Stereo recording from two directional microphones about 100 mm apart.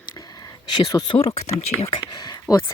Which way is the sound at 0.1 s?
40° left (ahead or behind).